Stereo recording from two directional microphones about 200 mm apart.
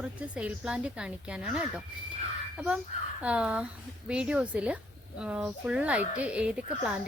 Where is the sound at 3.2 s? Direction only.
5° right (ahead or behind).